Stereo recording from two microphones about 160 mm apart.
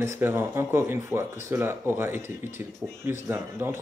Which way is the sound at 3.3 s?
15° right (ahead or behind).